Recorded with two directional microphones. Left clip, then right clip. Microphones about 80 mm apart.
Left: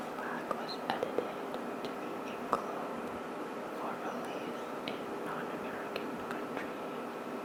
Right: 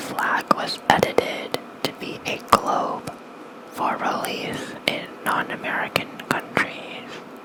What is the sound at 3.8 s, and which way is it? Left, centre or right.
Whispering, right.